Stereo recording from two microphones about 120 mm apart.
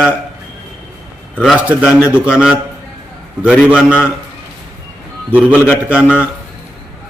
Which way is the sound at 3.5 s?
5° right (ahead or behind).